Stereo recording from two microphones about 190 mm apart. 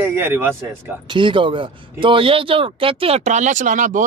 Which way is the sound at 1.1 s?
25° right (ahead or behind).